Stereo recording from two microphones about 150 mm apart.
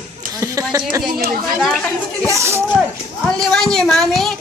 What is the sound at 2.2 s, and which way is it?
Speech, 20° right (ahead or behind).